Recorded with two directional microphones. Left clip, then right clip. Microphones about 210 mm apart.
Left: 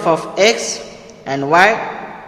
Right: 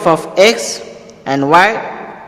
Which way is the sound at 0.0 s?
30° right (ahead or behind).